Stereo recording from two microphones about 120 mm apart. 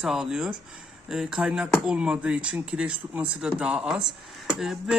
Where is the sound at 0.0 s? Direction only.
5° right (ahead or behind).